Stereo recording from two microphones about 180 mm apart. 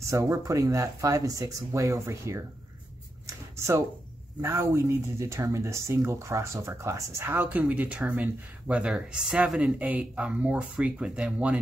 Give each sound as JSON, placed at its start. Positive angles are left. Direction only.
{"t": 0.1, "sound": "speech", "side_deg": -20}
{"t": 3.3, "sound": "a sound", "side_deg": -15}
{"t": 4.4, "sound": "speech", "side_deg": -15}